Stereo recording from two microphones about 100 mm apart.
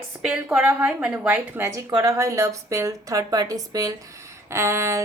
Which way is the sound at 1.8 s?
35° right (ahead or behind).